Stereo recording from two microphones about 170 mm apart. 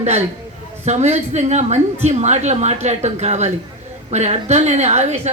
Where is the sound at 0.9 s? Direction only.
40° right (ahead or behind).